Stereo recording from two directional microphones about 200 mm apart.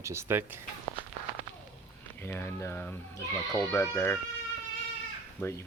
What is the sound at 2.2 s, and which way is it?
Speech, 10° left (ahead or behind).